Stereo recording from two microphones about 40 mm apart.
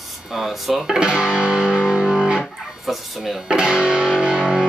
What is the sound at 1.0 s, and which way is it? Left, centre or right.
Music, right.